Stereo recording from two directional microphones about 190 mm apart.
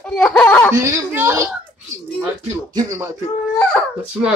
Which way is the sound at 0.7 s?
15° right (ahead or behind).